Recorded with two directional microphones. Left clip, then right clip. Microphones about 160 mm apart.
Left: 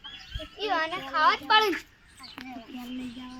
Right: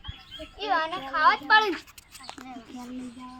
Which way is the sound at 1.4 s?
20° left (ahead or behind).